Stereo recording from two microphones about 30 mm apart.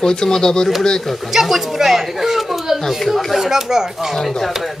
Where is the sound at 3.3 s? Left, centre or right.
Centre.